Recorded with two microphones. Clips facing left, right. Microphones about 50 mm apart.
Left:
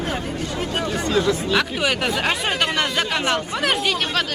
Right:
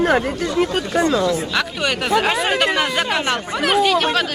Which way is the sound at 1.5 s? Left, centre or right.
Centre.